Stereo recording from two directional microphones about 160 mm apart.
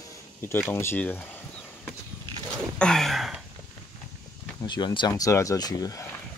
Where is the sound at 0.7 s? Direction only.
15° left (ahead or behind).